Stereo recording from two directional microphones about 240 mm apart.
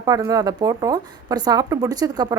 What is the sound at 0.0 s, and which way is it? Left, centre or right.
Speech, centre.